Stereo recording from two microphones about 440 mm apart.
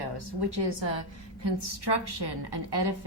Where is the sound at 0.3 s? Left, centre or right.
Right.